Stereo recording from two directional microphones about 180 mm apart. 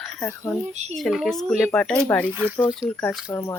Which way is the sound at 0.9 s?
Centre (ahead or behind).